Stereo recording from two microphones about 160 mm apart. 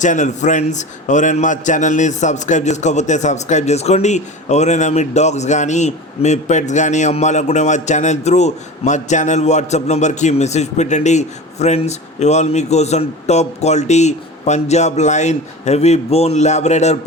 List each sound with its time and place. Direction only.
0.0 s a man's voice: 50° left (ahead or behind)